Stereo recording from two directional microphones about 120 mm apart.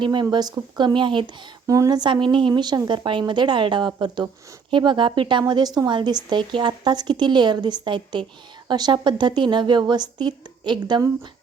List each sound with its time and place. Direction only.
0.0 s a woman's voice: 40° right (ahead or behind)
1.6 s a woman's voice: 30° right (ahead or behind)